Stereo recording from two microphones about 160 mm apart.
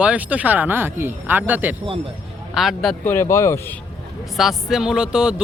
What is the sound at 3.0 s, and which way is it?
Speech, 15° left (ahead or behind).